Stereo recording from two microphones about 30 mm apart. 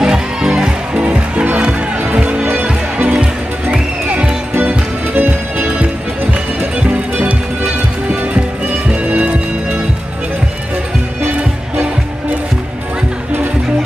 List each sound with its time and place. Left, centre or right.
0.0 s music: right
1.0 s music: right
4.6 s music: right
6.9 s music: right
8.8 s music: right